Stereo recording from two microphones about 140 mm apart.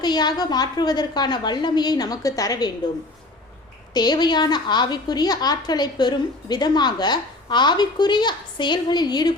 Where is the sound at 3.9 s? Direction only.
30° left (ahead or behind).